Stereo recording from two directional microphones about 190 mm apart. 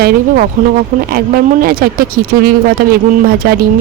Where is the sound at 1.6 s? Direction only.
50° right (ahead or behind).